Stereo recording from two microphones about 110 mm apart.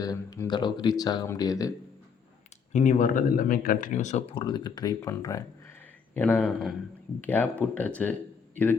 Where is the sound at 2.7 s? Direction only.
90° left.